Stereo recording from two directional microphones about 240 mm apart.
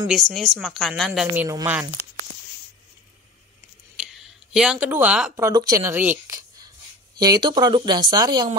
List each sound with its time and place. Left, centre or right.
0.1 s speech: centre
4.6 s speech: centre